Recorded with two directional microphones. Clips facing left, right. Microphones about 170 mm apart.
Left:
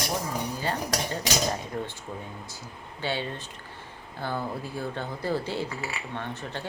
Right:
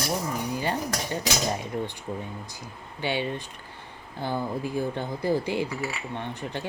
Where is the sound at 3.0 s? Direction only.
15° right (ahead or behind).